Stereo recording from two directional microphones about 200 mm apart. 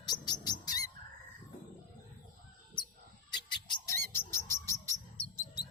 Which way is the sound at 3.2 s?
20° left (ahead or behind).